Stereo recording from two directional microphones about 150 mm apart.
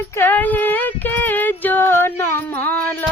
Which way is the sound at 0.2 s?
10° left (ahead or behind).